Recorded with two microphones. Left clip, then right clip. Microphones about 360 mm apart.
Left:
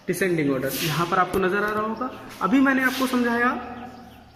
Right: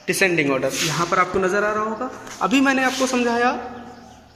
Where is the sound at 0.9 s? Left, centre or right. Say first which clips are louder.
Right 1 dB; centre.